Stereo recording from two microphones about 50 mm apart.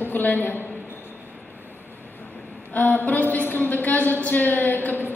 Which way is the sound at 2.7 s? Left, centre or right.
Left.